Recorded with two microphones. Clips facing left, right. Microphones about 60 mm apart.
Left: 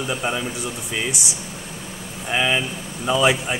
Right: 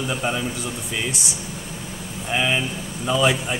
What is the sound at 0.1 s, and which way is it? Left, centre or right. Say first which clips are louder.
Speech: left 1 dB; centre.